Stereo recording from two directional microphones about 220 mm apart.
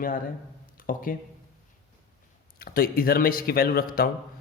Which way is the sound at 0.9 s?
40° left (ahead or behind).